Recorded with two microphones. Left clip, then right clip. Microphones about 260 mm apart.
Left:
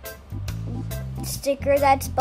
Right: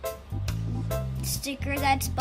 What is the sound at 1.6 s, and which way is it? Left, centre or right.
Speech, centre.